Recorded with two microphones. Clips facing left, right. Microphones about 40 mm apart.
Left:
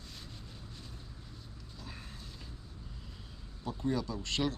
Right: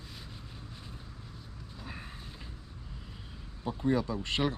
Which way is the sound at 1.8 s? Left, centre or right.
Right.